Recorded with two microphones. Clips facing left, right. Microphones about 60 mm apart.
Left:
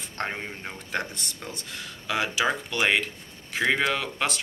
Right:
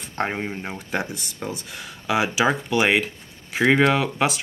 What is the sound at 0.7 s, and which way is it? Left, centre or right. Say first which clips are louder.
Speech: right 1 dB; centre.